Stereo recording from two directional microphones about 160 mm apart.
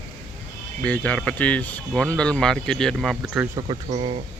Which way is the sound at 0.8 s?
10° left (ahead or behind).